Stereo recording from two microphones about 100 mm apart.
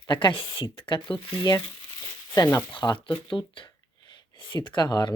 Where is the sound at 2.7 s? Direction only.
55° left (ahead or behind).